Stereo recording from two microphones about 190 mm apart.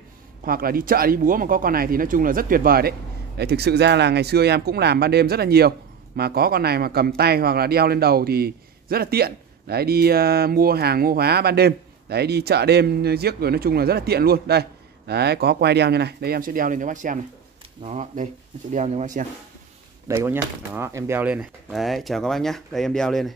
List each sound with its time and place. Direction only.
0.5 s a man's voice: 50° right (ahead or behind)
20.1 s speech: 10° right (ahead or behind)